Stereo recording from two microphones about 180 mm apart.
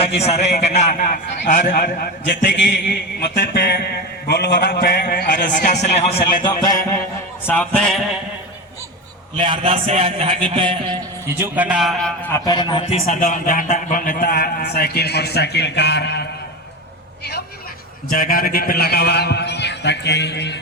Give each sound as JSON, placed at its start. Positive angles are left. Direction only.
{"t": 0.0, "sound": "a man's voice", "side_deg": 35}
{"t": 2.5, "sound": "a man's voice", "side_deg": 75}
{"t": 6.4, "sound": "a man's voice", "side_deg": 25}
{"t": 7.4, "sound": "speech", "side_deg": 10}
{"t": 9.4, "sound": "a man's voice", "side_deg": -30}
{"t": 11.3, "sound": "a man's voice", "side_deg": -10}
{"t": 12.3, "sound": "a man's voice", "side_deg": 25}
{"t": 12.9, "sound": "a man's voice", "side_deg": 40}
{"t": 18.1, "sound": "a man's voice", "side_deg": 50}